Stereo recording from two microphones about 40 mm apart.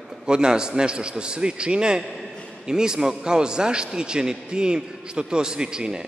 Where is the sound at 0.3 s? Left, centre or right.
Centre.